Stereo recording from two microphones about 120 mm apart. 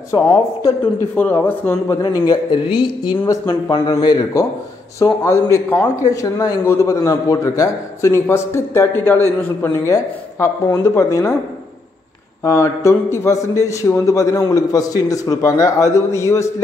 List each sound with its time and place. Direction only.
0.1 s a man's voice: 20° left (ahead or behind)
2.0 s a man's voice: 35° left (ahead or behind)
3.3 s a man's voice: 25° left (ahead or behind)
12.4 s a man's voice: 20° left (ahead or behind)